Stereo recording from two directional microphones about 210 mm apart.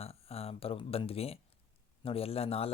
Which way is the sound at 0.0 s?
30° left (ahead or behind).